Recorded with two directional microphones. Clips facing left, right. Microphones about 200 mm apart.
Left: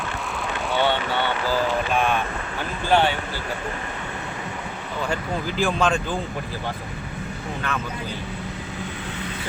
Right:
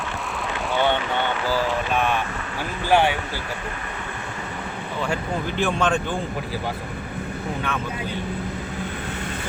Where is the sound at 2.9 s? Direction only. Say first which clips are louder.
Right 1 dB; 10° right (ahead or behind).